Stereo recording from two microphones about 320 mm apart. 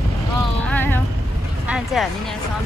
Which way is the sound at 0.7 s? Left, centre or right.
Centre.